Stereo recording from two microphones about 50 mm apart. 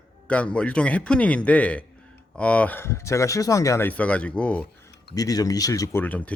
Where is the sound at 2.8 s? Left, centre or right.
Left.